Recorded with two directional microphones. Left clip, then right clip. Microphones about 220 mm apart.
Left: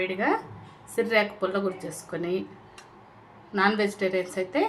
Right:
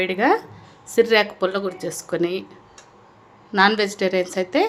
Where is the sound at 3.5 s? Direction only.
45° right (ahead or behind).